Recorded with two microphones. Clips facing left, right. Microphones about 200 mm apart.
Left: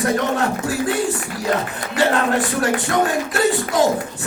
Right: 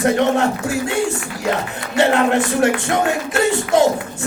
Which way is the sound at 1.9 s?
25° right (ahead or behind).